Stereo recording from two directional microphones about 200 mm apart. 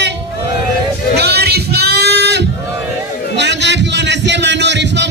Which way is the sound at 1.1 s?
55° right (ahead or behind).